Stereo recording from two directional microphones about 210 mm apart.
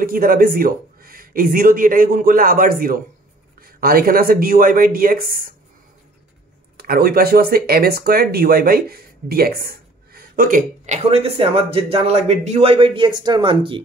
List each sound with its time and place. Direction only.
0.0 s speech: 45° right (ahead or behind)
6.8 s speech: 45° right (ahead or behind); by 13.8 s 25° right (ahead or behind)